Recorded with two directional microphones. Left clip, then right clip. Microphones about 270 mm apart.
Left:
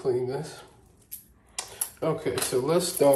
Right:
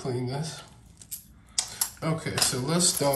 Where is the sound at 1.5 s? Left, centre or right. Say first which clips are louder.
Right 6 dB; centre.